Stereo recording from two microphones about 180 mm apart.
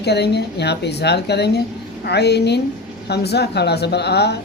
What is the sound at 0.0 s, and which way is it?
Speech, 65° left (ahead or behind).